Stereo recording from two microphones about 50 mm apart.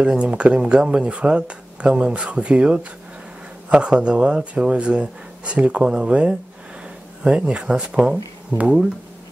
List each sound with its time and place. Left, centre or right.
0.0 s speech: centre